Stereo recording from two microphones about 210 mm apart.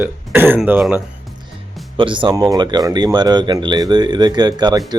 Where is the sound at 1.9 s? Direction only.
25° right (ahead or behind).